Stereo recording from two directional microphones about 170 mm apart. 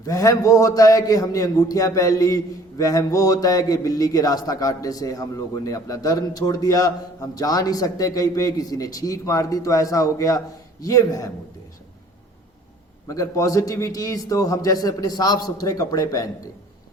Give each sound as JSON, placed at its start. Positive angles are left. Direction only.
{"t": 0.0, "sound": "a man's voice", "side_deg": 20}
{"t": 13.1, "sound": "a man's voice", "side_deg": 20}